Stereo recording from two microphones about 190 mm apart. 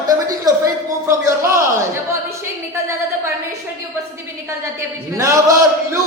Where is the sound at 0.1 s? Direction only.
20° right (ahead or behind).